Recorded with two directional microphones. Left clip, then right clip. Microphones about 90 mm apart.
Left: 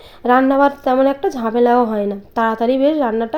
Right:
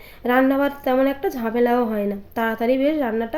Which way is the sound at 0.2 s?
35° left (ahead or behind).